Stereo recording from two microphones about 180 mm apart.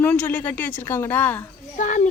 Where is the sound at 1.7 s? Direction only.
45° left (ahead or behind).